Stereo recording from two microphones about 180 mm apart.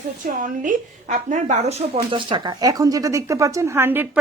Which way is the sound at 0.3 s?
50° right (ahead or behind).